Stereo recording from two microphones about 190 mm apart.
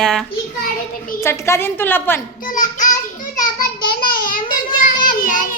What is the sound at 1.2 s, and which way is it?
A woman's voice, 15° left (ahead or behind).